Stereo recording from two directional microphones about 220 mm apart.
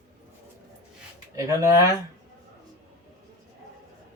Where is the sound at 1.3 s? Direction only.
15° right (ahead or behind).